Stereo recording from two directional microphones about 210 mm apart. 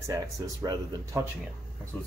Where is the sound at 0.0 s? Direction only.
15° right (ahead or behind).